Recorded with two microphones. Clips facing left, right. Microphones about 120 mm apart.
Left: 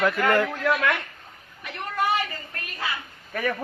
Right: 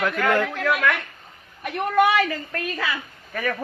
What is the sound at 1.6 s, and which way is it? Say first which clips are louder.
A woman's voice: right 8 dB; 55° right (ahead or behind).